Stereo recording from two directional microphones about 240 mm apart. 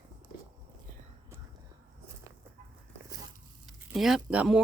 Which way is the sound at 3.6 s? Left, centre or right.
Centre.